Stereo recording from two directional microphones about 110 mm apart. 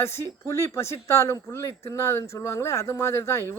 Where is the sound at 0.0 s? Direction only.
25° left (ahead or behind).